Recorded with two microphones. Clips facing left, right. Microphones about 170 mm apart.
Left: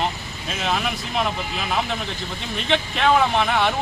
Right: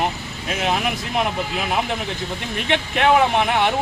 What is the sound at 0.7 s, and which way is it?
Speech, 15° right (ahead or behind).